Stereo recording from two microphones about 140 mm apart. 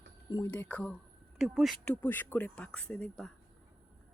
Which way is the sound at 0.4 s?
10° left (ahead or behind).